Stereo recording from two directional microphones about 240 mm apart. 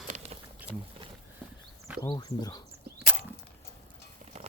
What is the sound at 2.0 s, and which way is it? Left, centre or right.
Speech, centre.